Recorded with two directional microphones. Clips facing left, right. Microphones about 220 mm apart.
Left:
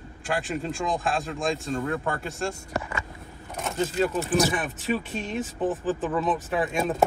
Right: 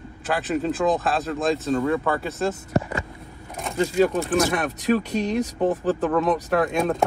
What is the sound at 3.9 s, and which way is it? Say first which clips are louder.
Speech: right 5 dB; centre (ahead or behind).